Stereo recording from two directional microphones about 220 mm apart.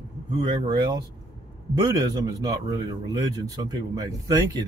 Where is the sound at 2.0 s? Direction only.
15° right (ahead or behind).